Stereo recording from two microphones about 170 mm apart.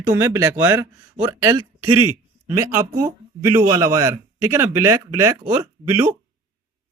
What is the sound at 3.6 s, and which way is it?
Speech, 20° right (ahead or behind).